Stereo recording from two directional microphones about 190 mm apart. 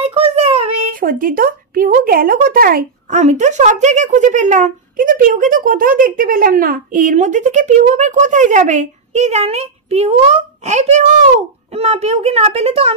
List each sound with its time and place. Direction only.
0.0 s child singing: 30° right (ahead or behind)
1.0 s speech: 50° right (ahead or behind); by 12.9 s 30° right (ahead or behind)